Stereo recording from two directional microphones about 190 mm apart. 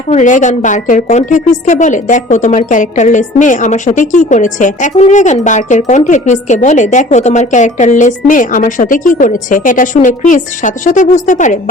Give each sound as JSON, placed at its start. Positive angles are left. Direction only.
{"t": 0.1, "sound": "a woman's voice", "side_deg": 40}